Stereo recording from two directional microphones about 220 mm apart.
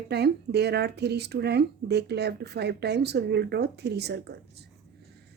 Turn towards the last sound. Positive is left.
turn(degrees=-50)  # may be behind; listen again after turning